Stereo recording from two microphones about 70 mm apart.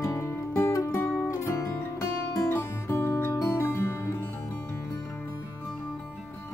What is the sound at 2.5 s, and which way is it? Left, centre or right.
Music, left.